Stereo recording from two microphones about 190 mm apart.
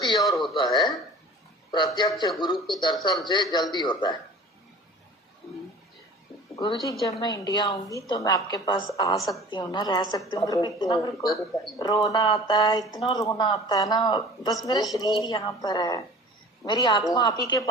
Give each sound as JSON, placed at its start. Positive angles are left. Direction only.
{"t": 0.0, "sound": "a sound", "side_deg": 20}
{"t": 0.5, "sound": "speech", "side_deg": 25}
{"t": 7.0, "sound": "a woman's voice", "side_deg": 20}